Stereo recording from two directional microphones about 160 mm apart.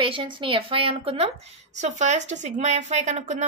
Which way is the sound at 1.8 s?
50° right (ahead or behind).